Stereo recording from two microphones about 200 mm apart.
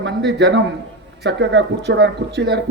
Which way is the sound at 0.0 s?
60° right (ahead or behind).